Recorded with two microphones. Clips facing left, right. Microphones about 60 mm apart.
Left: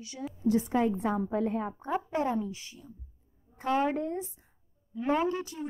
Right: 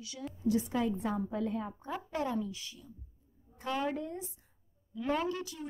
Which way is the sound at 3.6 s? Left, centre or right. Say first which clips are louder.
Left 6 dB; left.